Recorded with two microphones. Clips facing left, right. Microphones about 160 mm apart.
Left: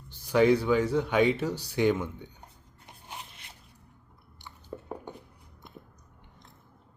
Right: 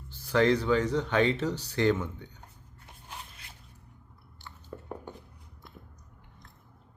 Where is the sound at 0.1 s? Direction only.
15° left (ahead or behind).